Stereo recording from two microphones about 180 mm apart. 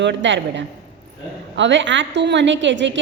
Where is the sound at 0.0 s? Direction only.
85° right.